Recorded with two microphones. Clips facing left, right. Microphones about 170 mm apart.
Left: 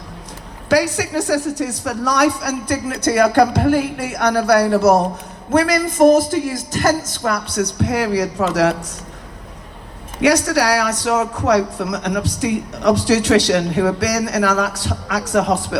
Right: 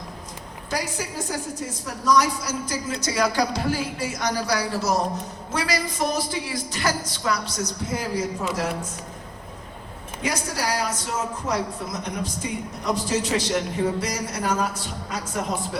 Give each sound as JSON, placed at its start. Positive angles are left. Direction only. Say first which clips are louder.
{"t": 0.7, "sound": "a woman's voice", "louder": "left 12 dB", "side_deg": 75}
{"t": 10.2, "sound": "speech", "louder": "left 12 dB", "side_deg": 75}